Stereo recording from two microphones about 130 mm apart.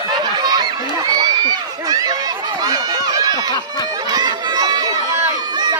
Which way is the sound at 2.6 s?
30° right (ahead or behind).